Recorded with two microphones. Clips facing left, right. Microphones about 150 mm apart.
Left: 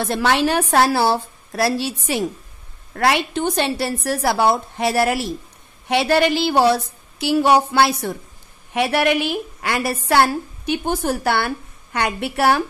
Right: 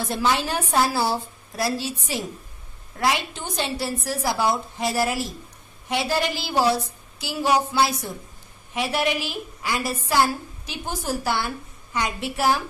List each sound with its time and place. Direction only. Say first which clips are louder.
0.0 s a woman's voice: left 5 dB; 70° left (ahead or behind)